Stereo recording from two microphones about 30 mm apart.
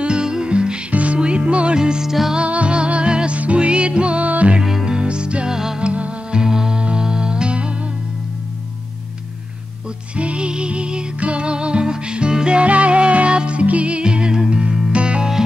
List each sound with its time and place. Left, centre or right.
0.0 s music: right
0.8 s music: right
1.8 s music: right
2.4 s music: right
5.5 s music: centre
5.8 s music: right
6.3 s music: right
10.1 s music: right
12.6 s music: right